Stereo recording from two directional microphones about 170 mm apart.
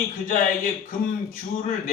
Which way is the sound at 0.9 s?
55° left (ahead or behind).